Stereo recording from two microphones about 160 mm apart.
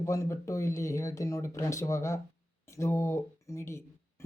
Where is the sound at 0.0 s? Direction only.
20° left (ahead or behind).